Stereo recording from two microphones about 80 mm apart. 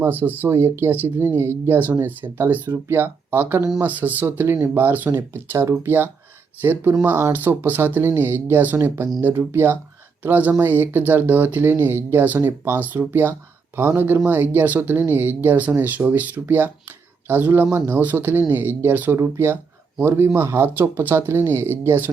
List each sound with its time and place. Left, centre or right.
0.0 s speech: right
10.2 s speech: right